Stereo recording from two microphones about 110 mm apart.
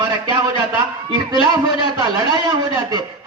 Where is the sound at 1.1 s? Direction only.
40° right (ahead or behind).